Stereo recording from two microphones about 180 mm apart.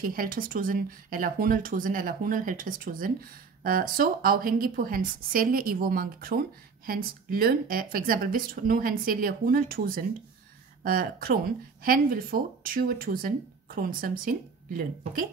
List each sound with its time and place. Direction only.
0.0 s a woman's voice: 50° right (ahead or behind)